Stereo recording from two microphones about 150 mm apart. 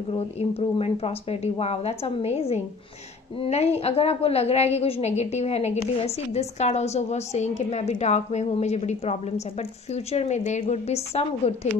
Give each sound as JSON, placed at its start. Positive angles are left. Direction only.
{"t": 0.1, "sound": "a woman's voice", "side_deg": 40}